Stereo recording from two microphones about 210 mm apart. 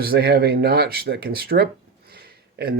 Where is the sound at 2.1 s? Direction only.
50° right (ahead or behind).